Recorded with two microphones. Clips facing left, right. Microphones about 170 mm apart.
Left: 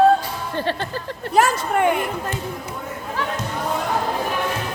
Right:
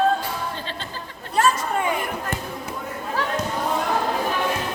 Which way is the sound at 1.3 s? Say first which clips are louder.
Left 3 dB; 75° left (ahead or behind).